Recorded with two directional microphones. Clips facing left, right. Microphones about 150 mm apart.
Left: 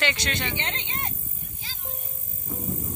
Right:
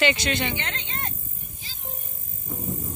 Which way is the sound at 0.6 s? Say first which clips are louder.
Even; 20° left (ahead or behind).